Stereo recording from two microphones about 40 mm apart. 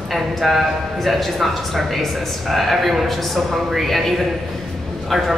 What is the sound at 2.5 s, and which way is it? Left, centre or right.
A man's voice, centre.